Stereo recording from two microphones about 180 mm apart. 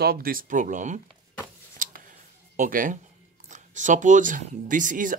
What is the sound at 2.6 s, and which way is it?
Speech, 50° right (ahead or behind).